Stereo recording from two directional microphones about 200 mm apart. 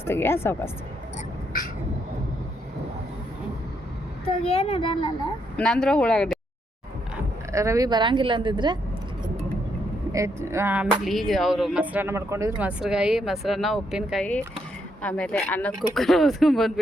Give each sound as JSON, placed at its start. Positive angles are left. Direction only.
{"t": 0.0, "sound": "speech", "side_deg": 10}
{"t": 4.3, "sound": "a child's voice", "side_deg": 30}
{"t": 5.5, "sound": "speech", "side_deg": 5}
{"t": 7.5, "sound": "speech", "side_deg": -15}
{"t": 10.1, "sound": "a sound", "side_deg": -15}
{"t": 11.0, "sound": "speech", "side_deg": 0}